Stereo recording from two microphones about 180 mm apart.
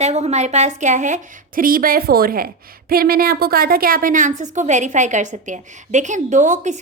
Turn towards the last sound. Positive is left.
turn(degrees=-45)  # may be behind; listen again after turning